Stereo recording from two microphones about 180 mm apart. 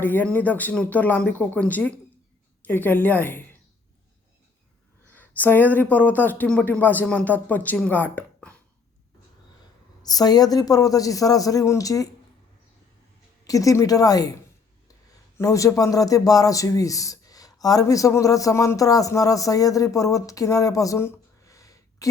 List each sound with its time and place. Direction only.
0.0 s speech: 10° left (ahead or behind)
5.1 s speech: 10° left (ahead or behind)
10.0 s a man's voice: 20° left (ahead or behind)
13.4 s a man's voice: 20° left (ahead or behind)
15.4 s a man's voice: 15° left (ahead or behind)